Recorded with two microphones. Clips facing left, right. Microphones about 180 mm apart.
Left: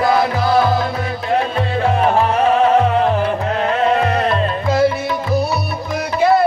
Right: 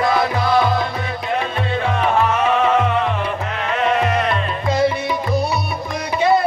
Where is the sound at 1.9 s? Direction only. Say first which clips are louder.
Left 2 dB; 35° left (ahead or behind).